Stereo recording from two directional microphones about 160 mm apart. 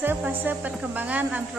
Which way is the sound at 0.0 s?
10° right (ahead or behind).